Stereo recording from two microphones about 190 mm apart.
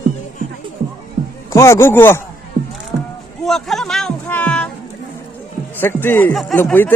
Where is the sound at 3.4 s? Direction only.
Centre (ahead or behind).